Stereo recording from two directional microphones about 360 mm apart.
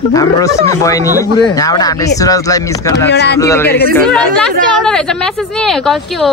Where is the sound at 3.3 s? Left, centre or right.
Centre.